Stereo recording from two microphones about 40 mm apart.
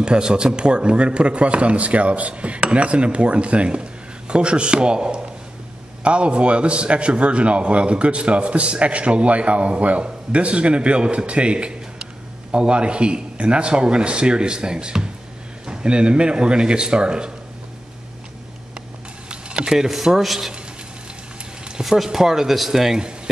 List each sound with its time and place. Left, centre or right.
0.0 s a man's voice: right
19.3 s speech: centre
21.8 s speech: centre
22.9 s speech: centre